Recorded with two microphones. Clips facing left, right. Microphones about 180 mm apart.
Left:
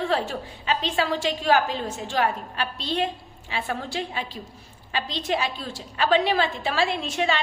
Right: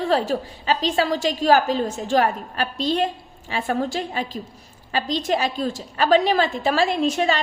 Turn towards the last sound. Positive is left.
turn(degrees=-40)  # may be behind; listen again after turning